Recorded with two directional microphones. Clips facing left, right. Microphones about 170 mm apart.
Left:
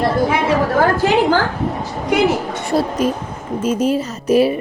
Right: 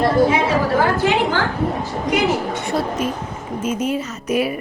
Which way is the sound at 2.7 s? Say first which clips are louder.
Left 6 dB; 35° left (ahead or behind).